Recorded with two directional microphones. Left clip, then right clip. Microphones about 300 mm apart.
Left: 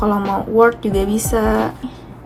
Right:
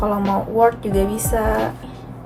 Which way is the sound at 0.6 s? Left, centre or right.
Left.